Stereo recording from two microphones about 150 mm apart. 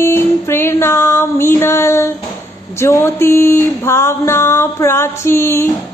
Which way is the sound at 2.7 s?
15° left (ahead or behind).